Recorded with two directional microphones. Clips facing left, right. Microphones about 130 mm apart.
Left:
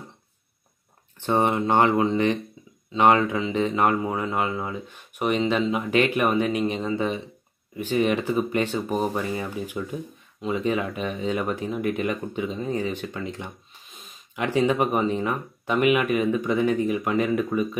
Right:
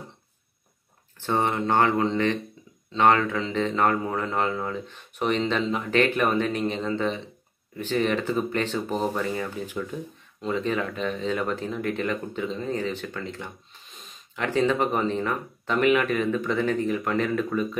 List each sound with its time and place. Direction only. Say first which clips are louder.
1.2 s speech: left 3 dB; 20° left (ahead or behind)